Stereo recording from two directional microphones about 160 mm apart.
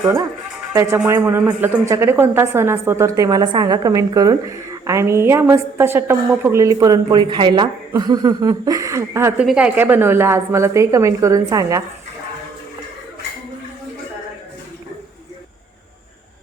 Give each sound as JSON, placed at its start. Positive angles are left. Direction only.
{"t": 0.0, "sound": "a woman's voice", "side_deg": -20}
{"t": 9.4, "sound": "a woman's voice", "side_deg": -5}